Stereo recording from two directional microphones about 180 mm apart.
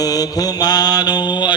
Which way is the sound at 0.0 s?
20° left (ahead or behind).